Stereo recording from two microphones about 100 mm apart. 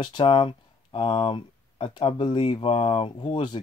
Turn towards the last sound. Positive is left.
turn(degrees=55)  # may be behind; listen again after turning